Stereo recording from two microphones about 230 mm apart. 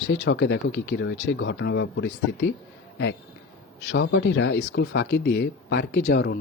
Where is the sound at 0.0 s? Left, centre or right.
Left.